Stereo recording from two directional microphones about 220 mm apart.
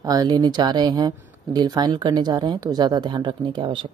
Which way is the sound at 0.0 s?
15° right (ahead or behind).